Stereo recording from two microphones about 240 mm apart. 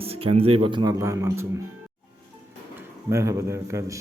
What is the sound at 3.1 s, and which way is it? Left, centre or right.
Speech, centre.